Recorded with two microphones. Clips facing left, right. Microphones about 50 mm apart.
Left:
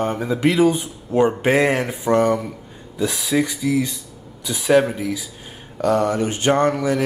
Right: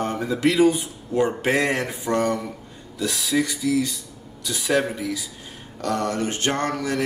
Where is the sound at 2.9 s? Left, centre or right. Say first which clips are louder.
Left 3 dB; left.